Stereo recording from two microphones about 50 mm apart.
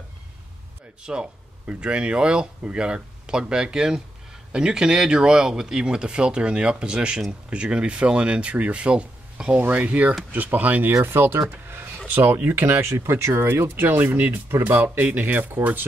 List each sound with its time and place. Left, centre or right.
1.0 s speech: right
9.6 s speech: right
11.1 s speech: right
11.6 s a sound: right
12.4 s speech: right